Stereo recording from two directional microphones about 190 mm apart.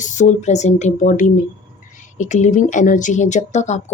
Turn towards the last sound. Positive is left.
turn(degrees=40)  # may be behind; listen again after turning